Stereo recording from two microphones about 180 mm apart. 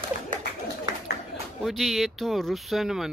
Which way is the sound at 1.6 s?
Centre (ahead or behind).